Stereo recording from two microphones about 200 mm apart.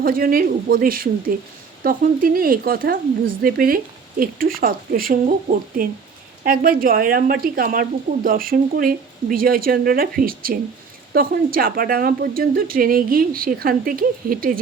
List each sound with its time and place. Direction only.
0.0 s speech: 45° right (ahead or behind)